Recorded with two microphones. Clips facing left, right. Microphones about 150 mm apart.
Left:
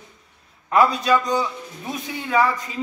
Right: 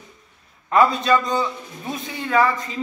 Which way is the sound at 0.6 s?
10° left (ahead or behind).